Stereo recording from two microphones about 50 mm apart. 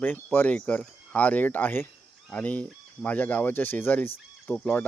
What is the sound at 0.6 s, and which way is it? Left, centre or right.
Speech, left.